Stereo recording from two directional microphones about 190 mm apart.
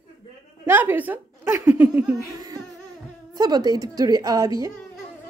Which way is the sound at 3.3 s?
20° right (ahead or behind).